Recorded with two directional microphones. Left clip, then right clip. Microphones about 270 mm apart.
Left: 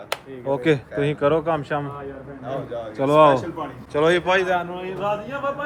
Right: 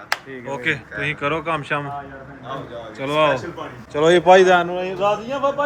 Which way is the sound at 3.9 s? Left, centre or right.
Centre.